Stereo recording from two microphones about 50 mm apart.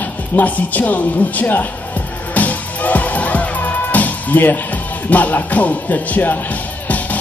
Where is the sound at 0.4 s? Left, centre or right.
Left.